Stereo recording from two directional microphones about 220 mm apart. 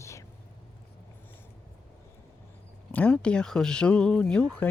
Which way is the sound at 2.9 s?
5° left (ahead or behind).